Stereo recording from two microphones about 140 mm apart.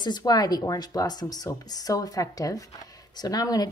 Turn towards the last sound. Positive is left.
turn(degrees=25)  # may be behind; listen again after turning